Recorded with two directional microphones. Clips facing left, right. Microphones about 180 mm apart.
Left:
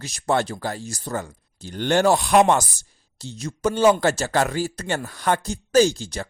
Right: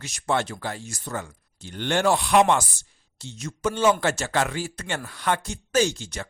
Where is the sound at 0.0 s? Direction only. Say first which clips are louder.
Left 3 dB; 35° left (ahead or behind).